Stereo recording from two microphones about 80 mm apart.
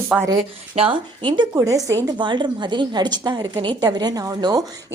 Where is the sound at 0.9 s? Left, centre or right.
Right.